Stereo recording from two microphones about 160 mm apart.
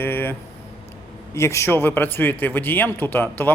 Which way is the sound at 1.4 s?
15° left (ahead or behind).